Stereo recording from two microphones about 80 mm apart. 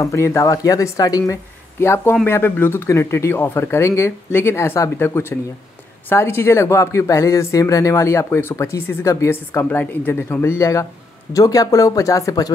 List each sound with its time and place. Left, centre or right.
0.0 s speech: left
1.3 s speech: left
9.3 s speech: left
10.6 s speech: left